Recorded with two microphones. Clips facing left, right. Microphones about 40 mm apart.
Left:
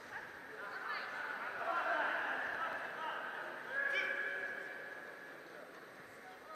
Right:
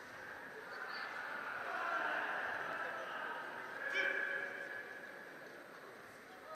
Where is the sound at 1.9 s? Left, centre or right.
Left.